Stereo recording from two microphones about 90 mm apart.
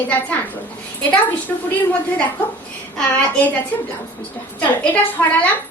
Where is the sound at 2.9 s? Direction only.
15° left (ahead or behind).